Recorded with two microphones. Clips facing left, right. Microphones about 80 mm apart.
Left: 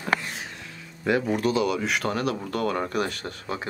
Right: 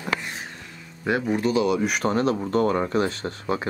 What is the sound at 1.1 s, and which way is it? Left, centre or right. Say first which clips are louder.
Speech: even; centre.